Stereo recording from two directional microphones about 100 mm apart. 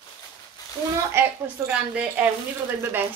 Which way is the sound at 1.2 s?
25° right (ahead or behind).